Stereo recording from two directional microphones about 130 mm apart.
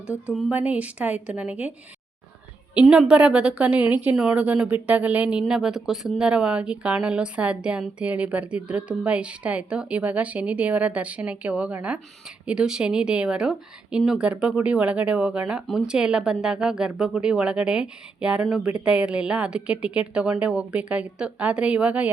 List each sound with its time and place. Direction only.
0.5 s speech: 10° right (ahead or behind)
2.7 s speech: centre (ahead or behind)